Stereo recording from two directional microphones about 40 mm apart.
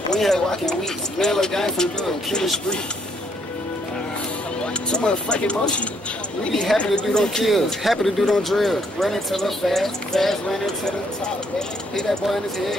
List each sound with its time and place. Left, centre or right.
0.1 s speech: centre
4.9 s speech: left
7.1 s speech: centre
7.4 s speech: centre
11.9 s speech: centre